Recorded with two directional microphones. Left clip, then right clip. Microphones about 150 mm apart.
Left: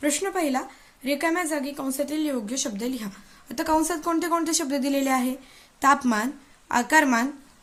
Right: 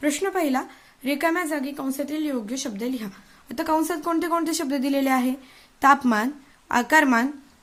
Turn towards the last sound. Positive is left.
turn(degrees=-25)  # may be behind; listen again after turning